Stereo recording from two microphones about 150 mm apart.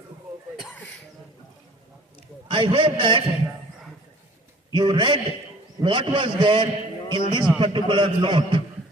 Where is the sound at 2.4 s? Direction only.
35° right (ahead or behind).